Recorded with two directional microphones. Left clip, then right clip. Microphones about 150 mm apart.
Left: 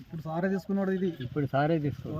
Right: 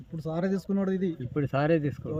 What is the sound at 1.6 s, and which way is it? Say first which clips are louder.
Speech: right 3 dB; 30° right (ahead or behind).